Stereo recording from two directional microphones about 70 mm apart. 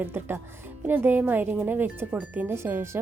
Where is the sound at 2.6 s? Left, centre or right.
Right.